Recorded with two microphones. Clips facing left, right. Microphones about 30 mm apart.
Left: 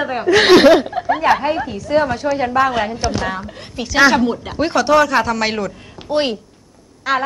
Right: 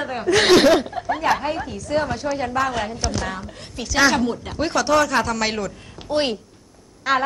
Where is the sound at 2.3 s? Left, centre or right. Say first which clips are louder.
Left 7 dB; left.